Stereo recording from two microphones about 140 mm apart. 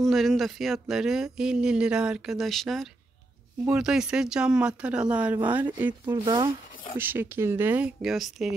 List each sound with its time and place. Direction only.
0.0 s speech: centre (ahead or behind)
6.2 s speech: 30° right (ahead or behind)
7.0 s speech: 15° right (ahead or behind)